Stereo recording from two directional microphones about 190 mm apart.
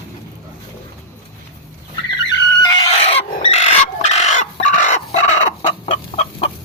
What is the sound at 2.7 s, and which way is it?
Chicken, 30° left (ahead or behind).